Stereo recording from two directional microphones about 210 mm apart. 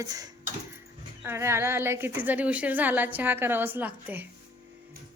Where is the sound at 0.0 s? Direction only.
15° right (ahead or behind).